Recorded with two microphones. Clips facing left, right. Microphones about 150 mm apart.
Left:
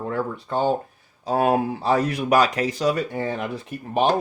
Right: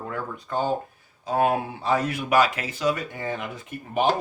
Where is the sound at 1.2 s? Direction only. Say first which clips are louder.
Left 3 dB; 35° left (ahead or behind).